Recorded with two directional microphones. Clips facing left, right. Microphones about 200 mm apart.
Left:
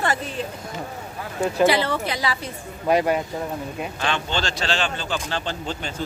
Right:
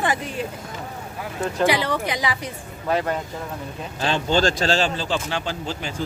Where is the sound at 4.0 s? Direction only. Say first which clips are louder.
Right 7 dB; 40° right (ahead or behind).